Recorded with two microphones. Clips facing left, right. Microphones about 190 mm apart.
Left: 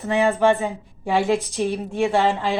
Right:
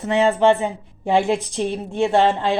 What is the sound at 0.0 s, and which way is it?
A woman's voice, 20° right (ahead or behind).